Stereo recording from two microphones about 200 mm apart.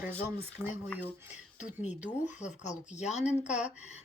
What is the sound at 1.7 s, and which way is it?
Speech, 35° left (ahead or behind).